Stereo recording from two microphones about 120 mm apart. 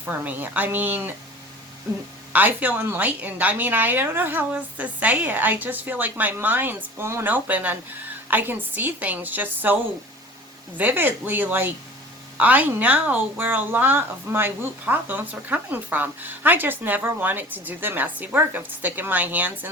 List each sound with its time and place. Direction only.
0.0 s a woman's voice: 15° right (ahead or behind)
2.3 s a woman's voice: 15° right (ahead or behind)